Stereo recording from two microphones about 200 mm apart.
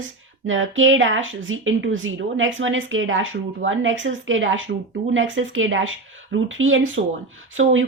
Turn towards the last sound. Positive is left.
turn(degrees=-75)  # may be behind; listen again after turning